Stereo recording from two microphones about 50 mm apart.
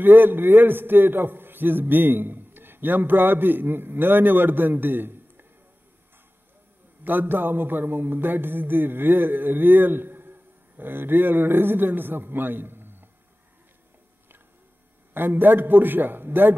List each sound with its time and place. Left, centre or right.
0.0 s a man's voice: right
7.1 s a man's voice: right
15.1 s a man's voice: right